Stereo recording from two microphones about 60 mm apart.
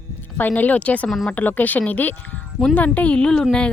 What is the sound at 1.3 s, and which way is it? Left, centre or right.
Speech, left.